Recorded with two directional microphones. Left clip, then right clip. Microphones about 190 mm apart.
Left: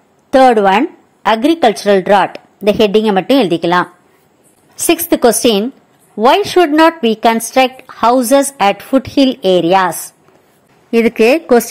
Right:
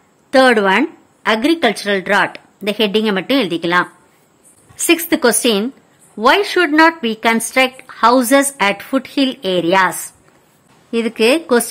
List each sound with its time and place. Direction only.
0.3 s a woman's voice: 15° left (ahead or behind)